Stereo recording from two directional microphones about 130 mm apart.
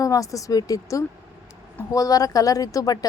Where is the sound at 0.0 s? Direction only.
25° left (ahead or behind).